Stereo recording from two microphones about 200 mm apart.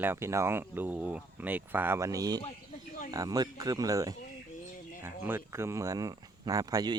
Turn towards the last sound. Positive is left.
turn(degrees=-20)  # may be behind; listen again after turning